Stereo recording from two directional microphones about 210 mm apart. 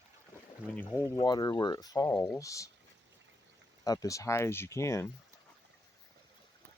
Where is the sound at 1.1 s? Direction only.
20° left (ahead or behind).